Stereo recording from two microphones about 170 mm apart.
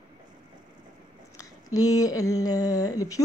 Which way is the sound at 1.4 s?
20° left (ahead or behind).